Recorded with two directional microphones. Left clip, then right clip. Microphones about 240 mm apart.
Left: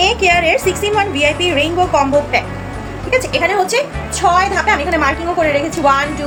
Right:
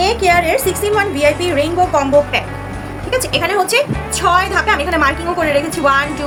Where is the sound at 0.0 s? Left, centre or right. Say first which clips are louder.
Left 1 dB; centre.